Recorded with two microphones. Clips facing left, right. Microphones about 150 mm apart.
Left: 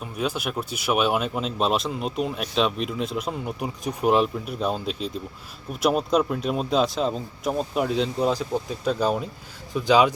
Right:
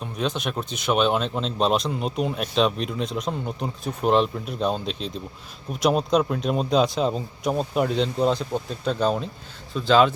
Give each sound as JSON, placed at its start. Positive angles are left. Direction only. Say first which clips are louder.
{"t": 0.0, "sound": "speech", "louder": "right 1 dB", "side_deg": 5}